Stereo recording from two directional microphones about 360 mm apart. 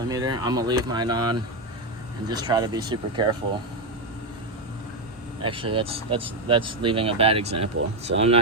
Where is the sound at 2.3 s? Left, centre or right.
Centre.